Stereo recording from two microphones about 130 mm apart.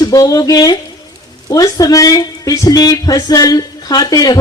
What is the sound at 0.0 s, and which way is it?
A man's voice, 30° left (ahead or behind).